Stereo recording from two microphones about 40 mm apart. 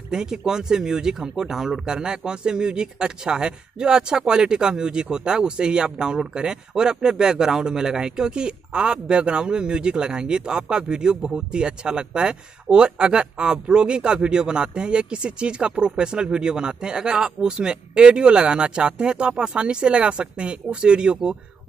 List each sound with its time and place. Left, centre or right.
0.1 s speech: centre